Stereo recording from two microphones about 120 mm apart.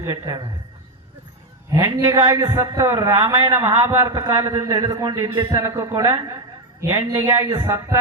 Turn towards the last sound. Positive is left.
turn(degrees=-25)  # may be behind; listen again after turning